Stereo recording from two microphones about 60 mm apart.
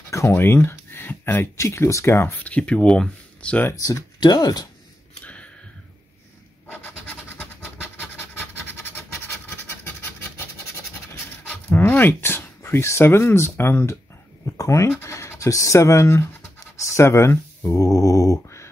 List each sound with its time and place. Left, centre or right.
0.3 s a sound: left
1.6 s speech: left
2.4 s speech: left
3.7 s speech: left
5.2 s a sound: left
6.7 s scratch: left
9.6 s a sound: left
11.7 s speech: left
14.4 s speech: left
17.6 s mantra: left